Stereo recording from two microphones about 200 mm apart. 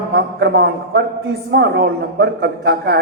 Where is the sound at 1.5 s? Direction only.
55° right (ahead or behind).